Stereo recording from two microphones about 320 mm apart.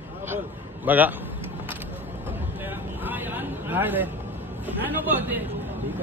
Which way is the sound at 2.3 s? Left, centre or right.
Centre.